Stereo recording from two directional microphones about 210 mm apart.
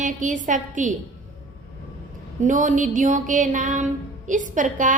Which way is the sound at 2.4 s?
35° right (ahead or behind).